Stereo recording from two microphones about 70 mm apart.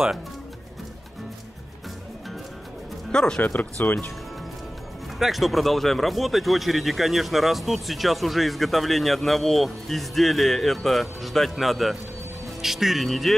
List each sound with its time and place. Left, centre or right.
3.1 s speech: centre
3.4 s speech: left
5.2 s speech: centre